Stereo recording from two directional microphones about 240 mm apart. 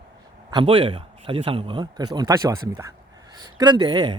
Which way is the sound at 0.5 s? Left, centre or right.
Right.